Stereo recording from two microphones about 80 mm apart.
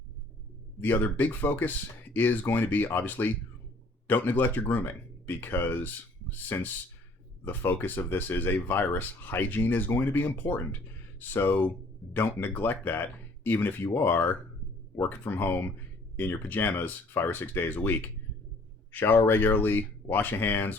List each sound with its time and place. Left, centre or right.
0.8 s speech: left